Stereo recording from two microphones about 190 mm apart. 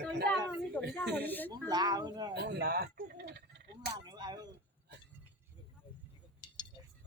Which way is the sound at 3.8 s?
20° right (ahead or behind).